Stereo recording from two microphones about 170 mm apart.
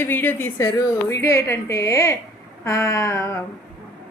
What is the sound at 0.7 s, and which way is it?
A woman's voice, 20° left (ahead or behind).